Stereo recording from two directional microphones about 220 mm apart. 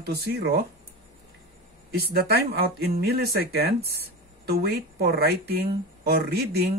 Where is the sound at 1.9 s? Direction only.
45° right (ahead or behind).